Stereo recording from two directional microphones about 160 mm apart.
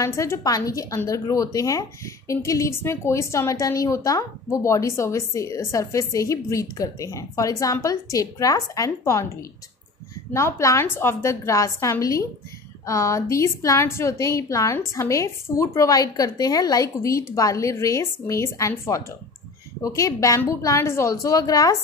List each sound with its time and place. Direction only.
0.0 s a woman's voice: 20° left (ahead or behind)
10.3 s a woman's voice: 20° left (ahead or behind)